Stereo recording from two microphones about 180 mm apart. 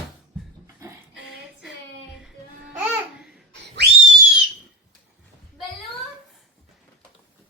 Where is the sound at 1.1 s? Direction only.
70° left (ahead or behind).